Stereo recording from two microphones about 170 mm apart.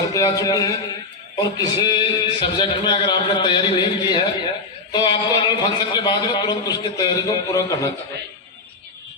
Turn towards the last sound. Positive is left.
turn(degrees=20)  # may be behind; listen again after turning